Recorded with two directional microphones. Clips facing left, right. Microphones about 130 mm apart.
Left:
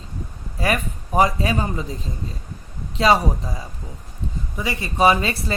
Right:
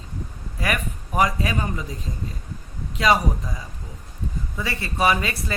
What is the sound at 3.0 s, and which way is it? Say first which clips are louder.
Speech: left 3 dB; 30° left (ahead or behind).